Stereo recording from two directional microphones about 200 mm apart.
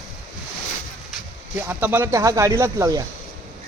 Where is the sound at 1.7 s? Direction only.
10° right (ahead or behind).